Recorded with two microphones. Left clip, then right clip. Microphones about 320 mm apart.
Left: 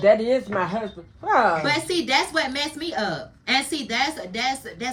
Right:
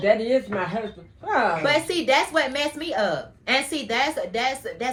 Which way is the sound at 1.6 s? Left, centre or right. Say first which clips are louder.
Right 2 dB; centre.